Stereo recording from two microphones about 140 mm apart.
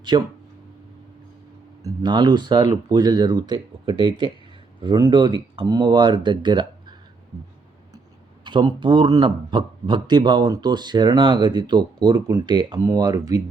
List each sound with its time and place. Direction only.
0.1 s speech: 30° right (ahead or behind)
1.8 s a man's voice: 30° right (ahead or behind)
8.4 s a man's voice: 35° right (ahead or behind)